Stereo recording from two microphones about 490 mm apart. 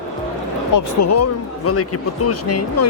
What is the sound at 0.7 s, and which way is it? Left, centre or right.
Speech, left.